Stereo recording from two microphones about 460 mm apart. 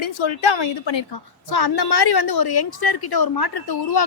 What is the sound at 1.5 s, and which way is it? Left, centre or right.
A woman's voice, left.